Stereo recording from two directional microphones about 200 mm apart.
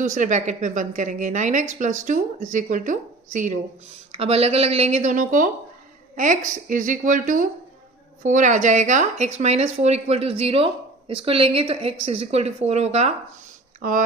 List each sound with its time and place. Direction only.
0.0 s speech: 40° right (ahead or behind)